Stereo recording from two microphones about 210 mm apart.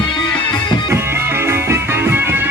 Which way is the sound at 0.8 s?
10° right (ahead or behind).